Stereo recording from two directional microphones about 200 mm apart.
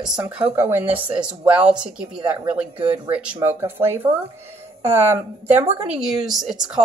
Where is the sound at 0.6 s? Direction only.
10° right (ahead or behind).